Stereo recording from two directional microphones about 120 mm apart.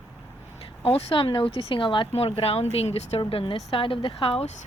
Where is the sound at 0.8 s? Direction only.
55° left (ahead or behind).